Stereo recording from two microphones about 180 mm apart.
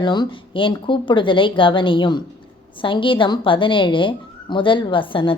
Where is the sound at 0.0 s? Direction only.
25° left (ahead or behind).